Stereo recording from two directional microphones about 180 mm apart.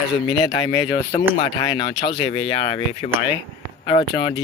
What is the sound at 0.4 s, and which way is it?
Speech, 25° left (ahead or behind).